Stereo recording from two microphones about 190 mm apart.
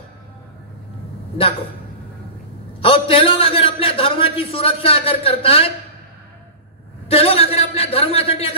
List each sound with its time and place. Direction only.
2.8 s a man's voice: 30° left (ahead or behind)
7.1 s a man's voice: 30° left (ahead or behind)